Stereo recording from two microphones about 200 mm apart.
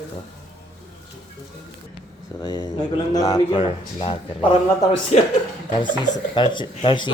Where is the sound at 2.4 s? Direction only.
20° left (ahead or behind).